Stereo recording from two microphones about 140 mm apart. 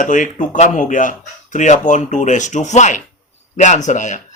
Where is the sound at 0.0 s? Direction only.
65° left (ahead or behind).